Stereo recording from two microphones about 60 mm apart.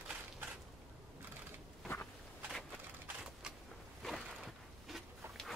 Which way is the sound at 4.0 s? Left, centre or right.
Centre.